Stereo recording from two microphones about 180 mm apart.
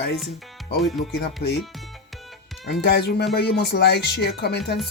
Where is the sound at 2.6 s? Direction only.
65° left (ahead or behind).